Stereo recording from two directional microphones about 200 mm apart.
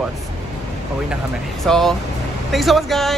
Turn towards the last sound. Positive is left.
turn(degrees=0)  # may be behind; listen again after turning